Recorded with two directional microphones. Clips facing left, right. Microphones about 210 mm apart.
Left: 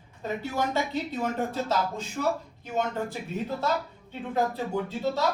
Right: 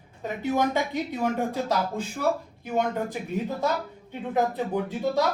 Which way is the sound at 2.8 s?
15° right (ahead or behind).